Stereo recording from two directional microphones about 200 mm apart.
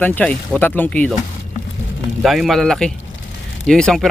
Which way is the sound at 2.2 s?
Centre (ahead or behind).